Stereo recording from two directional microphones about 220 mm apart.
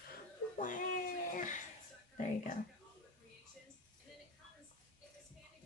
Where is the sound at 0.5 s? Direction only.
35° left (ahead or behind).